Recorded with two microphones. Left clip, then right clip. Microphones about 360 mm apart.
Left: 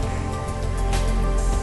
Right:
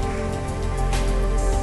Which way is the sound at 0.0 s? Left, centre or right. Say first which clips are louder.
Right 2 dB; centre.